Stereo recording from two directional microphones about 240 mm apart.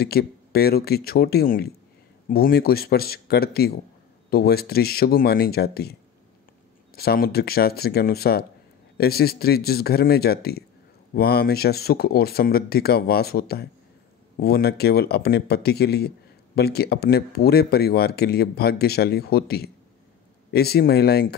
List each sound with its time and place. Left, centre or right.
0.0 s speech: left
7.0 s speech: left